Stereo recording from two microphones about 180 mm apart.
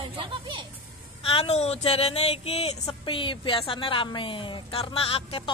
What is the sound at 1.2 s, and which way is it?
A man's voice, 30° left (ahead or behind).